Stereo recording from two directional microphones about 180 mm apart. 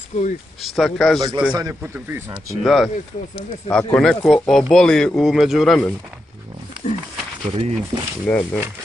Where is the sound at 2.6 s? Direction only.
Centre (ahead or behind).